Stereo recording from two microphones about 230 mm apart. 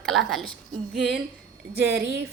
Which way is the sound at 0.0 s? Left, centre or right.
Centre.